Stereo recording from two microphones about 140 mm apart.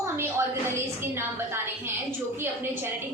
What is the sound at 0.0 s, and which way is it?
A woman's voice, 20° right (ahead or behind).